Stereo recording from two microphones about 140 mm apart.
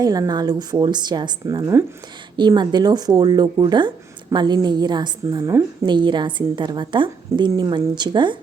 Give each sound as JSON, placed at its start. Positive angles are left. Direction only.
{"t": 0.0, "sound": "a woman's voice", "side_deg": -25}